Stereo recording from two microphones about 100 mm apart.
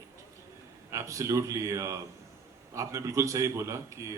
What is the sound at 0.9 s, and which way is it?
A man's voice, 30° right (ahead or behind).